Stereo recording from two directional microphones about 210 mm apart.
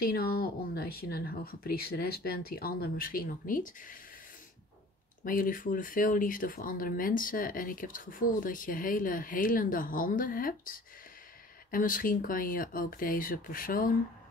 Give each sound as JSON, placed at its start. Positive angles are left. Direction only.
{"t": 0.0, "sound": "speech", "side_deg": 45}
{"t": 5.2, "sound": "speech", "side_deg": 40}